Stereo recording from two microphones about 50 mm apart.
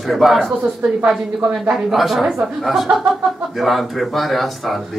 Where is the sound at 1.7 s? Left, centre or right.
Centre.